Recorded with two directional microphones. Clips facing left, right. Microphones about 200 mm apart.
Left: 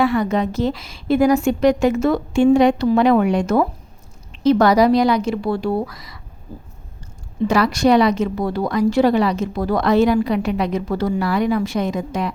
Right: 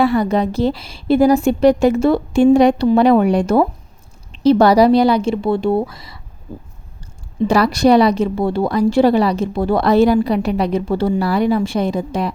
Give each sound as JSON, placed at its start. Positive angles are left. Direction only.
{"t": 0.0, "sound": "a woman's voice", "side_deg": -35}
{"t": 7.4, "sound": "a woman's voice", "side_deg": -35}